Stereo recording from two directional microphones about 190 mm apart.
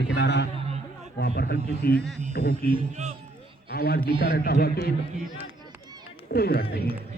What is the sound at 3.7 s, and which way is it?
A man's voice, 55° left (ahead or behind).